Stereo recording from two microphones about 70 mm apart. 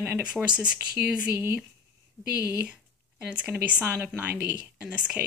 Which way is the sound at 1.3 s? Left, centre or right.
Right.